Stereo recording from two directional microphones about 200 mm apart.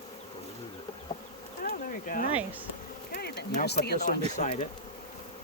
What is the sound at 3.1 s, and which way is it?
Speech, 55° left (ahead or behind).